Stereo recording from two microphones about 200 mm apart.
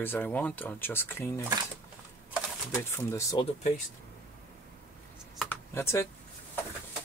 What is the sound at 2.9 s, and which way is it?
Speech, 15° left (ahead or behind).